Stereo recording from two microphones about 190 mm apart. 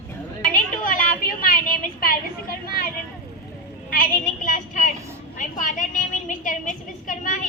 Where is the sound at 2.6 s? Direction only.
50° left (ahead or behind).